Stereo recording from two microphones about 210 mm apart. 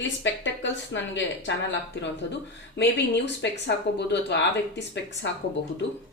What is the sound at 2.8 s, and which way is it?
Speech, 55° left (ahead or behind).